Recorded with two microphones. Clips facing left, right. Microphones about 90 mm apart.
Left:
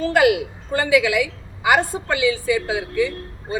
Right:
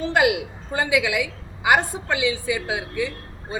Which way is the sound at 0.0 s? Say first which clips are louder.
Left 3 dB; 15° right (ahead or behind).